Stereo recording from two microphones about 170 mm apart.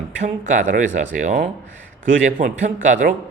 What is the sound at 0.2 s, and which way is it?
A man's voice, 45° right (ahead or behind).